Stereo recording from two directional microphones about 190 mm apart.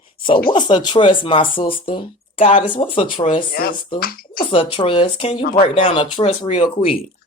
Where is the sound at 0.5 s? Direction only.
25° left (ahead or behind).